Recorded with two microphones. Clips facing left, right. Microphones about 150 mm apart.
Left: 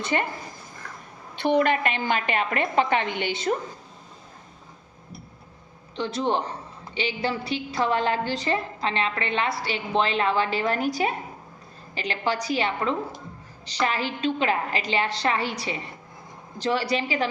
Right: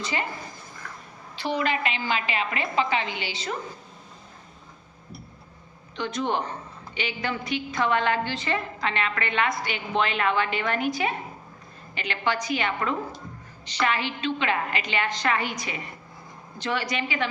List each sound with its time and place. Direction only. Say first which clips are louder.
0.0 s speech: left 4 dB; 55° left (ahead or behind)
1.4 s a woman's voice: left 5 dB; 55° left (ahead or behind)
6.0 s a woman's voice: left 2 dB; 30° left (ahead or behind)